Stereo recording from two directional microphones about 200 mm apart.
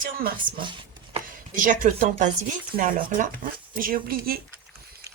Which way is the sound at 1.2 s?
45° right (ahead or behind).